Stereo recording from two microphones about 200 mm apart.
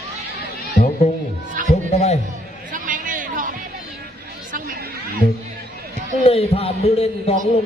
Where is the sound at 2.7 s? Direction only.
40° right (ahead or behind).